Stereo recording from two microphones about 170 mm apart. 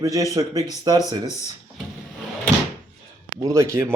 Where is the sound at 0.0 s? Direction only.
20° right (ahead or behind).